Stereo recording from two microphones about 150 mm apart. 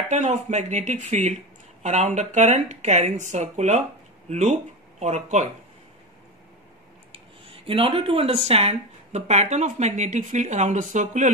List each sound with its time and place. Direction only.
0.1 s speech: 50° right (ahead or behind)
7.1 s speech: 35° right (ahead or behind); by 11.3 s 55° right (ahead or behind)